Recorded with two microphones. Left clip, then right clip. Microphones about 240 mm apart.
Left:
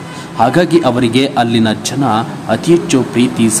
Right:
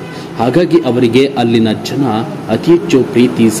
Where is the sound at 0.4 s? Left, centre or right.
Centre.